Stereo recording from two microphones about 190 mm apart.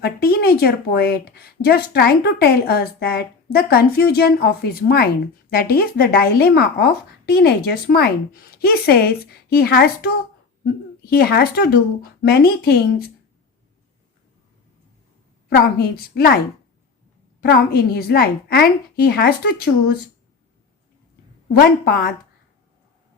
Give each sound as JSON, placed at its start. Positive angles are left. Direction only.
{"t": 0.0, "sound": "a woman's voice", "side_deg": 55}
{"t": 15.4, "sound": "a woman's voice", "side_deg": 55}
{"t": 17.4, "sound": "a woman's voice", "side_deg": 55}
{"t": 21.6, "sound": "a woman's voice", "side_deg": 55}